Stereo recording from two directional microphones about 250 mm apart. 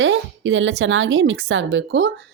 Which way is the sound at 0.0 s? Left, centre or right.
Right.